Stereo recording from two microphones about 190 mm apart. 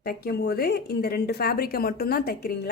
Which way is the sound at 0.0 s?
55° left (ahead or behind).